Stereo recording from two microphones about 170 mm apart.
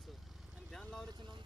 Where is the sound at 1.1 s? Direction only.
25° right (ahead or behind).